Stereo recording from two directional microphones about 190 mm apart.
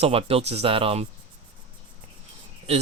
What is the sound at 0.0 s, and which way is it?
Speech, 30° right (ahead or behind).